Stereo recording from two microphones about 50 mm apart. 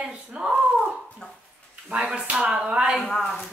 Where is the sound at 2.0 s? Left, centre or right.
Centre.